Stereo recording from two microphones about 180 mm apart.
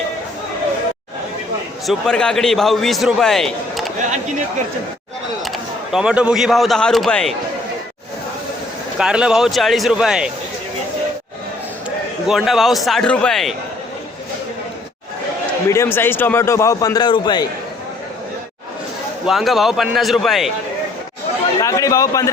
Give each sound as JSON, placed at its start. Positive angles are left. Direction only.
{"t": 1.9, "sound": "a man's voice", "side_deg": 5}
{"t": 5.5, "sound": "a man's voice", "side_deg": -5}
{"t": 9.0, "sound": "a man's voice", "side_deg": -5}
{"t": 12.3, "sound": "a man's voice", "side_deg": 0}
{"t": 15.7, "sound": "a man's voice", "side_deg": 15}
{"t": 19.2, "sound": "a man's voice", "side_deg": 0}
{"t": 21.6, "sound": "a man's voice", "side_deg": 20}